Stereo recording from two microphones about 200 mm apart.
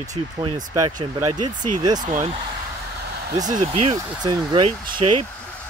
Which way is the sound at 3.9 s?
20° right (ahead or behind).